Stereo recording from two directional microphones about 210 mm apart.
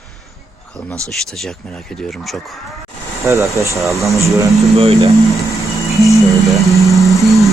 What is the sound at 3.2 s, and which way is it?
Speech, 15° right (ahead or behind).